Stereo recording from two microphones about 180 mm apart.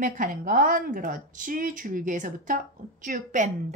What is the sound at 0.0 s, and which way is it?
A woman's voice, 50° right (ahead or behind).